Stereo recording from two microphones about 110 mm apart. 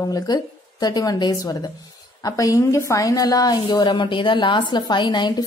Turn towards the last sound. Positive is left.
turn(degrees=45)  # may be behind; listen again after turning